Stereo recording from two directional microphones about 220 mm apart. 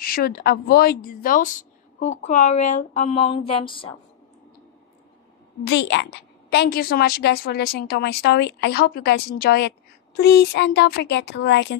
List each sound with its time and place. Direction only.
0.0 s a woman's voice: 45° left (ahead or behind); by 3.9 s 25° left (ahead or behind)
5.6 s a woman's voice: 55° left (ahead or behind)